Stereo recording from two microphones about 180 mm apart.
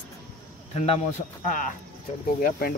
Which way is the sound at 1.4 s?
45° left (ahead or behind).